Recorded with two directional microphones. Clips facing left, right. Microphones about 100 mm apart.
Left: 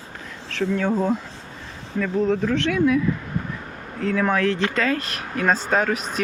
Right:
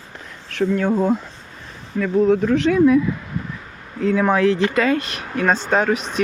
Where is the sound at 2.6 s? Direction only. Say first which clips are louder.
Right 6 dB; 30° right (ahead or behind).